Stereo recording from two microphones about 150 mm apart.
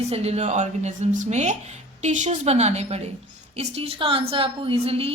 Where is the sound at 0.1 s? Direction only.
45° right (ahead or behind).